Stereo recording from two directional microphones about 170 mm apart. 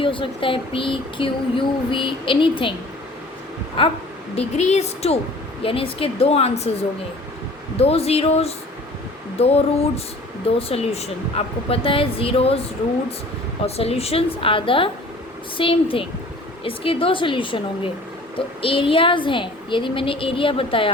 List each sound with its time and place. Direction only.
0.0 s speech: 30° left (ahead or behind)
3.8 s speech: 30° left (ahead or behind)
7.8 s speech: 35° left (ahead or behind)
10.6 s speech: 35° left (ahead or behind)
13.7 s speech: 35° left (ahead or behind)